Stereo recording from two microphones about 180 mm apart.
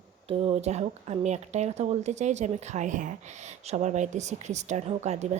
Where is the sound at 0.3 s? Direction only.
35° right (ahead or behind).